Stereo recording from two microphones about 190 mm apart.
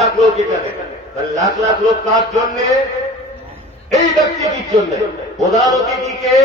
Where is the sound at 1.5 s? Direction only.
20° right (ahead or behind).